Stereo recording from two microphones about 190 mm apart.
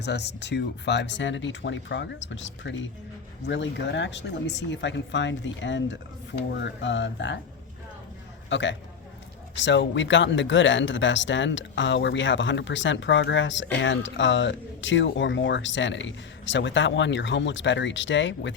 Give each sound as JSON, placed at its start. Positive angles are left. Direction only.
{"t": 0.0, "sound": "speech", "side_deg": 65}
{"t": 8.4, "sound": "a man's voice", "side_deg": 70}